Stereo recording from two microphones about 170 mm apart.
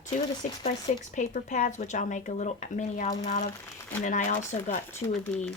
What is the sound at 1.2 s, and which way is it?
Speech, 50° left (ahead or behind).